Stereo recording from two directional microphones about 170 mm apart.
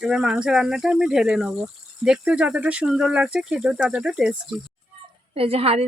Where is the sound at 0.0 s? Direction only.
5° right (ahead or behind).